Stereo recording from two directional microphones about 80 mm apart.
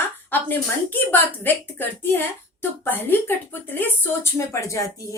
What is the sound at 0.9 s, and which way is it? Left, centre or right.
A woman's voice, left.